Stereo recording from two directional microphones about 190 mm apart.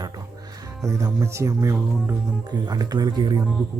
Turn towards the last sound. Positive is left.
turn(degrees=-20)  # may be behind; listen again after turning